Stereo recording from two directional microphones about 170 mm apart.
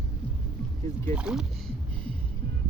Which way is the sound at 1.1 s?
5° right (ahead or behind).